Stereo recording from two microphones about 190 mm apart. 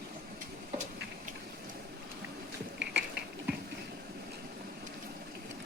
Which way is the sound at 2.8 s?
65° right (ahead or behind).